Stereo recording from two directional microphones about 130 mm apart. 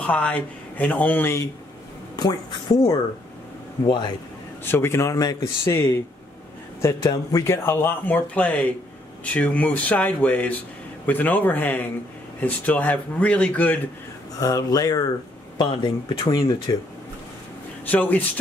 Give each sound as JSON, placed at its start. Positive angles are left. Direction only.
{"t": 0.0, "sound": "speech", "side_deg": 10}
{"t": 2.1, "sound": "speech", "side_deg": 30}
{"t": 4.6, "sound": "speech", "side_deg": 20}
{"t": 14.4, "sound": "speech", "side_deg": 30}
{"t": 17.8, "sound": "speech", "side_deg": 10}